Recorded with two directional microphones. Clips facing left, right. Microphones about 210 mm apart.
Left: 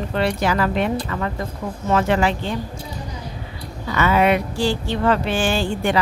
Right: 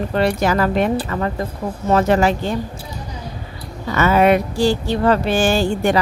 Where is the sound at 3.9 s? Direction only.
45° right (ahead or behind).